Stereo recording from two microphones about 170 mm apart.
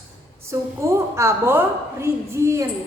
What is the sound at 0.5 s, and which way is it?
A woman's voice, 15° right (ahead or behind).